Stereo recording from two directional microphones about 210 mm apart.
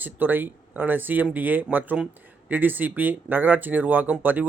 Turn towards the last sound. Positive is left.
turn(degrees=-10)  # may be behind; listen again after turning